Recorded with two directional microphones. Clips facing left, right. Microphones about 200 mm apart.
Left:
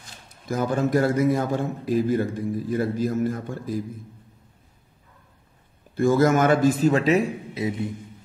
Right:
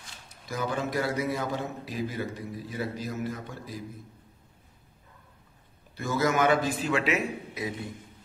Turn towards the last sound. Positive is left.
turn(degrees=25)  # may be behind; listen again after turning